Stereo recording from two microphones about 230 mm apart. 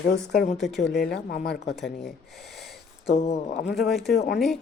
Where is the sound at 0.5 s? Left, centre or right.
Centre.